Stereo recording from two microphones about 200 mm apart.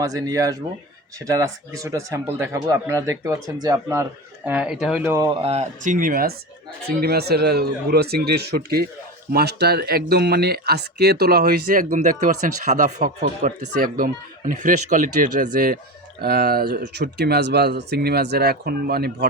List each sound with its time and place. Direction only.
0.0 s speech: 15° right (ahead or behind)
4.4 s speech: 5° right (ahead or behind)
5.1 s speech: 20° right (ahead or behind); by 19.3 s 50° right (ahead or behind)